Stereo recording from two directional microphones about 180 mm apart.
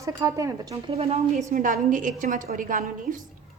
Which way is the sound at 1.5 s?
45° right (ahead or behind).